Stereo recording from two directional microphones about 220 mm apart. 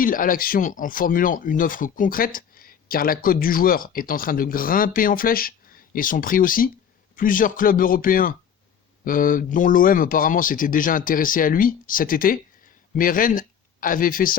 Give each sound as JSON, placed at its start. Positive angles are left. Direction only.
{"t": 0.0, "sound": "speech", "side_deg": 40}